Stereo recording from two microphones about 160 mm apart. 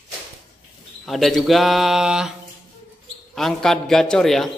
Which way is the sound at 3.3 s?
Centre (ahead or behind).